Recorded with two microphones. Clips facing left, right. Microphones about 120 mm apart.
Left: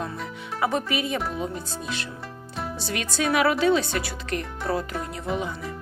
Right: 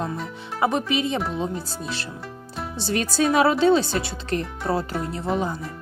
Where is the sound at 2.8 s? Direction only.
35° right (ahead or behind).